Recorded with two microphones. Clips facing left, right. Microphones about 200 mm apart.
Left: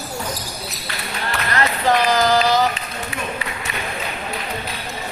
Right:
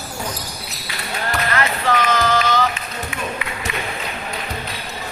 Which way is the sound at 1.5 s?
35° left (ahead or behind).